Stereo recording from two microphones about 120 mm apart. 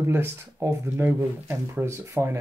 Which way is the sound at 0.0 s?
20° right (ahead or behind).